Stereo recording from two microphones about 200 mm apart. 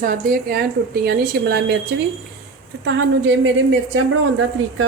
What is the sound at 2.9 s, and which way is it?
Speech, 65° right (ahead or behind).